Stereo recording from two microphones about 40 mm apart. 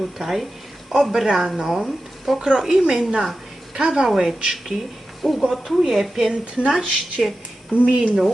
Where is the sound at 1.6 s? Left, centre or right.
Centre.